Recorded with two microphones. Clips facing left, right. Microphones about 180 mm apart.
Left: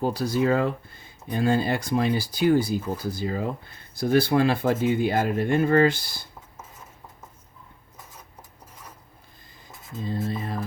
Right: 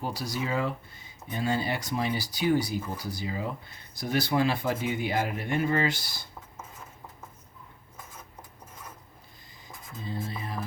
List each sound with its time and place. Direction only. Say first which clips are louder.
0.0 s speech: left 9 dB; 50° left (ahead or behind)
10.2 s speech: left 6 dB; 50° left (ahead or behind)